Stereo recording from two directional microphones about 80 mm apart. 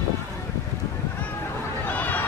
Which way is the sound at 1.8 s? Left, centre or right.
Left.